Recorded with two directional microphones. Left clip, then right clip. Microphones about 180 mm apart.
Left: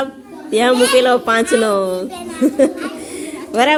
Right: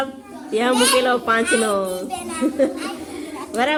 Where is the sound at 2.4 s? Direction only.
35° left (ahead or behind).